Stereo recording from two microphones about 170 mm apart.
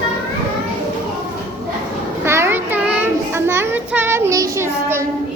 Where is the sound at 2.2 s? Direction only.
15° right (ahead or behind).